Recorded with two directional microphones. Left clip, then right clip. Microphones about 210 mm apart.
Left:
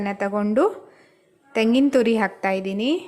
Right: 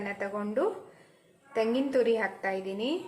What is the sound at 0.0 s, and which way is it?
A woman's voice, 50° left (ahead or behind).